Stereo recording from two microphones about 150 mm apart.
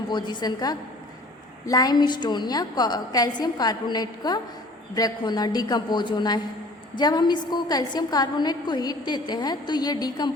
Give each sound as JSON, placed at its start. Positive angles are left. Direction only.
{"t": 0.1, "sound": "a woman's voice", "side_deg": 30}